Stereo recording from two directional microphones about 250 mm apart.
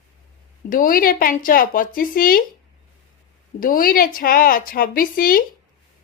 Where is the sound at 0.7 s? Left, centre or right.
Left.